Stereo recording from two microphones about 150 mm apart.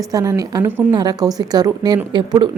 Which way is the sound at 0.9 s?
25° right (ahead or behind).